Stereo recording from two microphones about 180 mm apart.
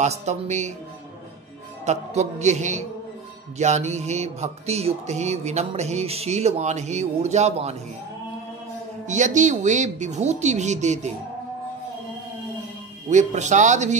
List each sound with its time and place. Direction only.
0.0 s mantra: 40° right (ahead or behind)
1.9 s mantra: 40° right (ahead or behind)
9.0 s mantra: 40° right (ahead or behind)
13.1 s mantra: 40° right (ahead or behind)